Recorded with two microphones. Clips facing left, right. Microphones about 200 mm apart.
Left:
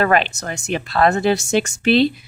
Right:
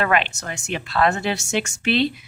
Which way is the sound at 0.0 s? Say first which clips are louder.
Left 4 dB; 40° left (ahead or behind).